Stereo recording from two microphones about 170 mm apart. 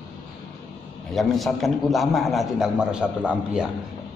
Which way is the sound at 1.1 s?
Centre (ahead or behind).